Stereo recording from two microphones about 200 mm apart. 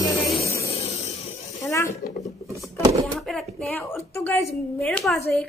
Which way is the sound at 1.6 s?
15° left (ahead or behind).